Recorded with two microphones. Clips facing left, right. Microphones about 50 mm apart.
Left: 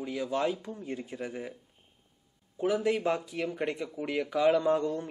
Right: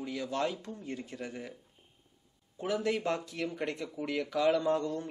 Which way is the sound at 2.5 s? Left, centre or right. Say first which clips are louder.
Left 4 dB; centre.